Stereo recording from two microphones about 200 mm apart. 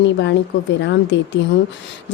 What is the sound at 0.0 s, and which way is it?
Speech, 60° left (ahead or behind).